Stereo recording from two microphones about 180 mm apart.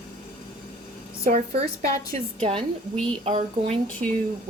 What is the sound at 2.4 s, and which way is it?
Speech, 30° right (ahead or behind).